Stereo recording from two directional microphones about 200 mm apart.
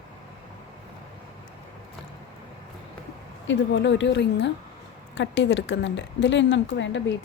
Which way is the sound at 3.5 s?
65° left (ahead or behind).